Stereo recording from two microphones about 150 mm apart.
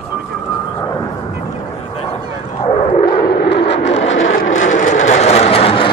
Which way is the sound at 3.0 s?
30° left (ahead or behind).